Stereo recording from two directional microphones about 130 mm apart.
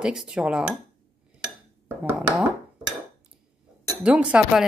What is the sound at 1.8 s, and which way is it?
Speech, 15° right (ahead or behind).